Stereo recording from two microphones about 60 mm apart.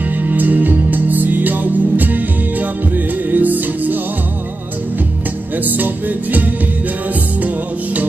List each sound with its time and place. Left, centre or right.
0.2 s music: right
5.6 s music: right